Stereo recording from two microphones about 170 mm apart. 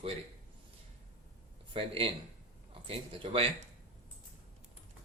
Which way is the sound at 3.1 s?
30° right (ahead or behind).